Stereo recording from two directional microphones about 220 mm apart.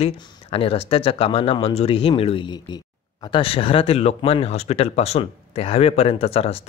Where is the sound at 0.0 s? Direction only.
25° left (ahead or behind).